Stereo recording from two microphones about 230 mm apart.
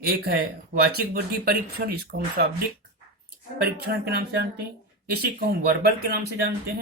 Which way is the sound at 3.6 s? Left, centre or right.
Right.